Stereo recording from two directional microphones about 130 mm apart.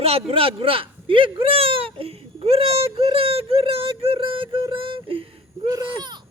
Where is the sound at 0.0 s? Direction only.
50° right (ahead or behind).